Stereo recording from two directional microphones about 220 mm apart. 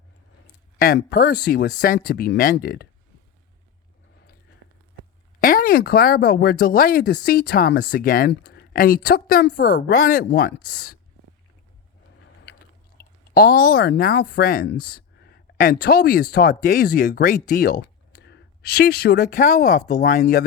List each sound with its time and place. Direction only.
0.8 s speech: 40° left (ahead or behind)
5.4 s speech: 40° left (ahead or behind)
13.0 s speech: 45° left (ahead or behind)
17.8 s a sound: 50° left (ahead or behind)
19.4 s speech: 35° left (ahead or behind)